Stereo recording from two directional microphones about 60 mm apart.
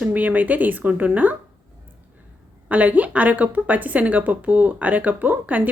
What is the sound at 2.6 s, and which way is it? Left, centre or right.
A woman's voice, right.